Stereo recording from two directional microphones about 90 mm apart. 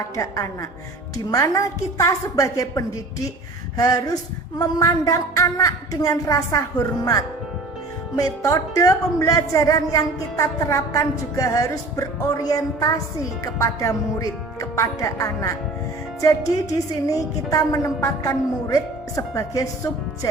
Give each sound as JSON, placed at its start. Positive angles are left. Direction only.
{"t": 0.2, "sound": "speech", "side_deg": 35}